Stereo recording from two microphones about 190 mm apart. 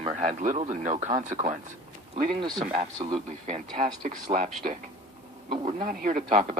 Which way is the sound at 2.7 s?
30° right (ahead or behind).